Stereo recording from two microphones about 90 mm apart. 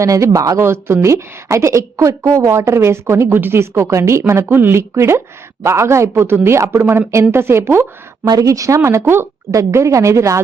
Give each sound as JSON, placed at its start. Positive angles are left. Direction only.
{"t": 0.0, "sound": "a woman's voice", "side_deg": -35}
{"t": 8.3, "sound": "a woman's voice", "side_deg": -40}